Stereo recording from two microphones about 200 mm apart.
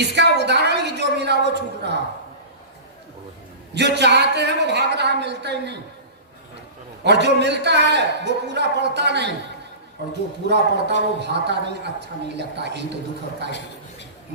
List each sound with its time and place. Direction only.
0.2 s a sound: 60° right (ahead or behind)
3.8 s a man's voice: 60° right (ahead or behind)
7.0 s a man's voice: 60° right (ahead or behind)
10.4 s a man's voice: 55° right (ahead or behind)